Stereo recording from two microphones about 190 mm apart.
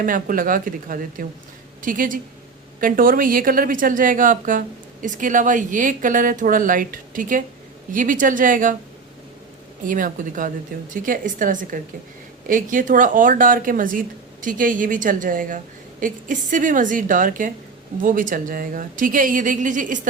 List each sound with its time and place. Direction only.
0.0 s a woman's voice: 45° right (ahead or behind)
9.8 s a woman's voice: 45° right (ahead or behind)